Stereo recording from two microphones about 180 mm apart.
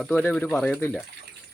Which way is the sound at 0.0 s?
5° left (ahead or behind).